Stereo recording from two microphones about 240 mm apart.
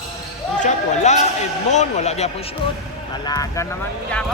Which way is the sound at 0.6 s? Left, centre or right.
Left.